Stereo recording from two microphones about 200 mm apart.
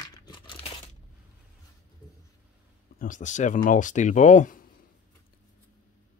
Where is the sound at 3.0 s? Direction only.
40° left (ahead or behind).